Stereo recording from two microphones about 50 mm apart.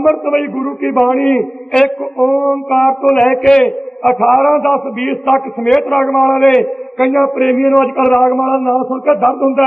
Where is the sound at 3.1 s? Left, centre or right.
Centre.